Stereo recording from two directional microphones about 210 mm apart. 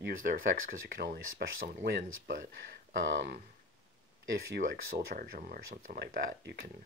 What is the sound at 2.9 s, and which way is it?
Speech, 60° right (ahead or behind).